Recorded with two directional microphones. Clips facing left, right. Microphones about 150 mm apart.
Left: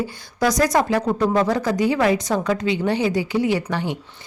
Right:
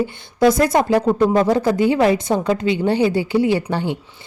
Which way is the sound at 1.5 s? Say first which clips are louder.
Right 4 dB; 25° right (ahead or behind).